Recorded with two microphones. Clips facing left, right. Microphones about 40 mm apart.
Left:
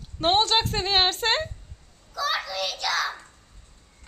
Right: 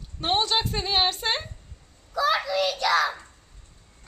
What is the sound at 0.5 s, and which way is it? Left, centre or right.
Speech, left.